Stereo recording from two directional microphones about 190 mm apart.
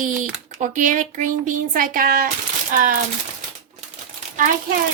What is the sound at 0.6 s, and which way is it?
Speech, 40° right (ahead or behind).